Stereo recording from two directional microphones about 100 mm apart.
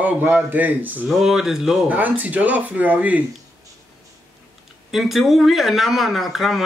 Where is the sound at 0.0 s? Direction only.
15° right (ahead or behind).